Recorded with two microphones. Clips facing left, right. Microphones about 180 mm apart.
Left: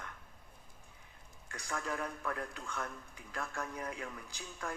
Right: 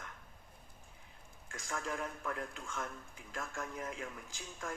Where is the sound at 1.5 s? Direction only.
40° left (ahead or behind).